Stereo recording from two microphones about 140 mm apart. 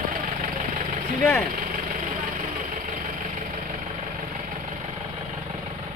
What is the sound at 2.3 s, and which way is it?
Engine, 70° right (ahead or behind).